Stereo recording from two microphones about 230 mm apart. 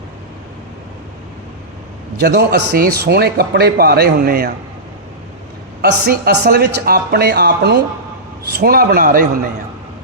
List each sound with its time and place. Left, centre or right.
2.2 s speech: right
5.8 s a man's voice: right